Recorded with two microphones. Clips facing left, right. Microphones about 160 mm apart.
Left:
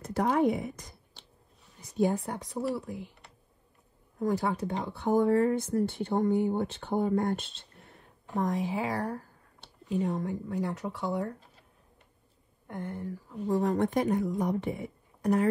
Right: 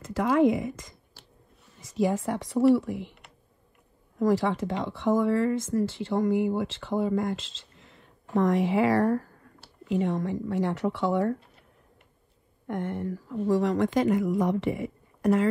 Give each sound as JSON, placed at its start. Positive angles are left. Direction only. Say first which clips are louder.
{"t": 0.0, "sound": "a woman's voice", "louder": "right 4 dB", "side_deg": -90}
{"t": 1.2, "sound": "a sound", "louder": "right 1 dB", "side_deg": -5}
{"t": 1.8, "sound": "a woman's voice", "louder": "right 1 dB", "side_deg": -90}
{"t": 4.2, "sound": "a woman's voice", "louder": "right 5 dB", "side_deg": -90}
{"t": 12.6, "sound": "speech", "louder": "right 6 dB", "side_deg": -80}